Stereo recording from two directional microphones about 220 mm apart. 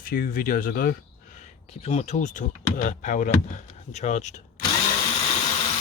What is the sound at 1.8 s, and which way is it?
Speech, 30° left (ahead or behind).